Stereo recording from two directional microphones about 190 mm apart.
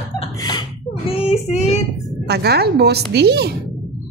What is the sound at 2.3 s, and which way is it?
A woman's voice, 55° right (ahead or behind).